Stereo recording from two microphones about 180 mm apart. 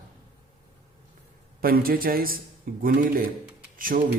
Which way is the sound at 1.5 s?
55° right (ahead or behind).